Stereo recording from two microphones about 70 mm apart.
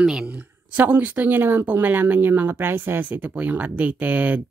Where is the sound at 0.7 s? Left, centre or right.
Right.